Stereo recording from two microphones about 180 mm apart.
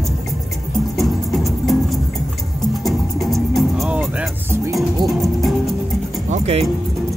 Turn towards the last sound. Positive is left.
turn(degrees=-35)  # may be behind; listen again after turning